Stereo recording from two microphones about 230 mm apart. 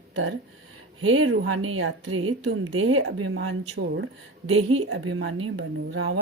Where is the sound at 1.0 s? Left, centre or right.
Right.